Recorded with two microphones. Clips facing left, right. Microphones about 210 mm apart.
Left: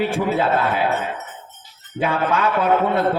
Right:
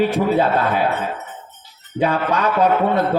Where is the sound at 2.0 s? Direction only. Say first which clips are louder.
Right 1 dB; 40° right (ahead or behind).